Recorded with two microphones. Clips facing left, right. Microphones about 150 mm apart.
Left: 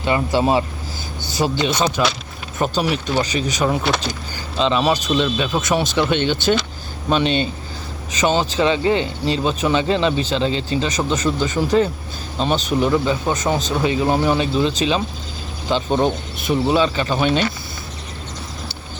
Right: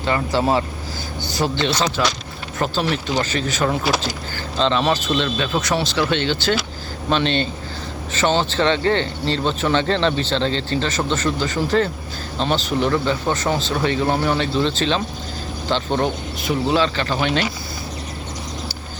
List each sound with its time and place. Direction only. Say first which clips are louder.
0.0 s speech: left 2 dB; 15° left (ahead or behind)
3.8 s speech: even; 5° right (ahead or behind)
4.5 s speech: left 1 dB; 10° left (ahead or behind)